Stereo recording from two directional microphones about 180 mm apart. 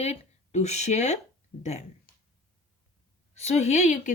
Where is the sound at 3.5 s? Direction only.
35° left (ahead or behind).